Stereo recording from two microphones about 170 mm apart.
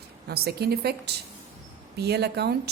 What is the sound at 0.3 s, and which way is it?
A woman's voice, 65° right (ahead or behind).